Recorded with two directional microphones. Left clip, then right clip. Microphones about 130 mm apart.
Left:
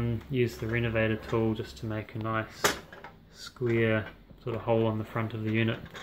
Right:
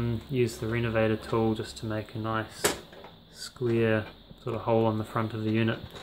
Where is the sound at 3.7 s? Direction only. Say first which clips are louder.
Right 1 dB; 25° right (ahead or behind).